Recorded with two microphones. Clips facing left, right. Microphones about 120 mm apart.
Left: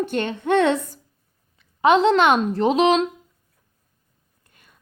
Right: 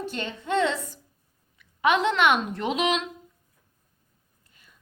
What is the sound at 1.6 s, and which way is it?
A woman's voice, 30° left (ahead or behind).